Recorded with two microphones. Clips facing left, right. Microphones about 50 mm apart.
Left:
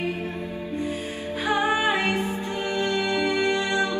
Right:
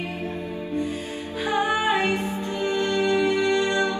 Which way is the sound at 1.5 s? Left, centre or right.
Left.